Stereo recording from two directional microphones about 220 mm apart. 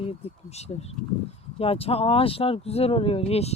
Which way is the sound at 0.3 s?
30° left (ahead or behind).